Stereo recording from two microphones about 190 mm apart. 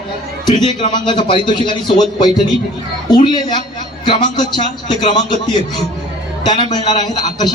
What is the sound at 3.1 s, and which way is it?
A man's voice, 25° left (ahead or behind).